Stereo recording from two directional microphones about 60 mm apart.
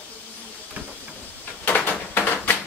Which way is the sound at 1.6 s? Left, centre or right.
Left.